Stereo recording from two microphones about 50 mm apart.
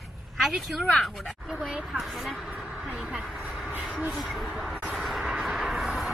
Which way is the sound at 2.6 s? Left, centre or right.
Centre.